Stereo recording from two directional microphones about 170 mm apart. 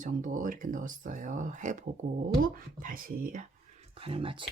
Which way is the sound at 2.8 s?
55° right (ahead or behind).